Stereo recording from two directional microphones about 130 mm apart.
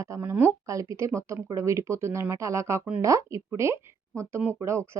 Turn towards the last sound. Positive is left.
turn(degrees=-20)  # may be behind; listen again after turning